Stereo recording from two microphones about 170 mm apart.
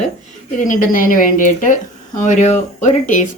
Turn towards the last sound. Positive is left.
turn(degrees=45)  # may be behind; listen again after turning